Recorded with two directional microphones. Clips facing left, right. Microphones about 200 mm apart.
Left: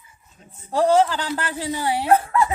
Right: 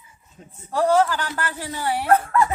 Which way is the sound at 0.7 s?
20° left (ahead or behind).